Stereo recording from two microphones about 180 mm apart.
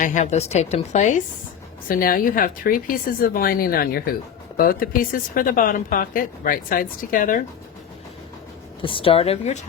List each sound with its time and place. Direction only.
0.0 s a woman's voice: 45° left (ahead or behind)
1.9 s a woman's voice: 55° left (ahead or behind)
8.8 s a woman's voice: 30° left (ahead or behind)